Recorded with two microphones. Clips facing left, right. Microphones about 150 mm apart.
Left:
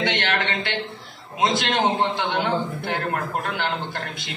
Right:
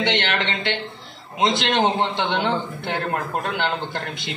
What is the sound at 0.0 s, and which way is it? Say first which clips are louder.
A man's voice: right 1 dB; 25° right (ahead or behind).